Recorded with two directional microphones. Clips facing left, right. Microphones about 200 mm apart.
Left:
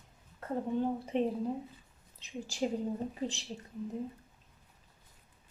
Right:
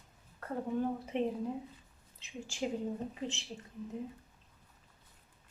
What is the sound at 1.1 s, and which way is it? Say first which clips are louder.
Speech: left 3 dB; 35° left (ahead or behind).